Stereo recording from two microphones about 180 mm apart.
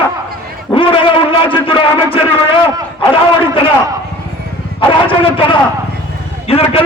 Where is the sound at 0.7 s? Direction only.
30° left (ahead or behind).